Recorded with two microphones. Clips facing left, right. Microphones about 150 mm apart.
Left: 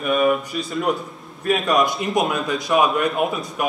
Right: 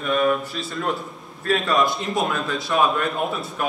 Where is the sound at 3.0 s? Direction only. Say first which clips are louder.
Left 3 dB; 5° left (ahead or behind).